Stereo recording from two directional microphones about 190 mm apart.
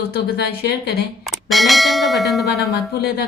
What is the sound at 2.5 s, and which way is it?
Speech, 60° left (ahead or behind).